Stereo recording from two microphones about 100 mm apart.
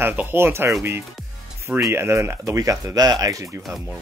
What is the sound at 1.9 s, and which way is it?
Speech, 25° right (ahead or behind).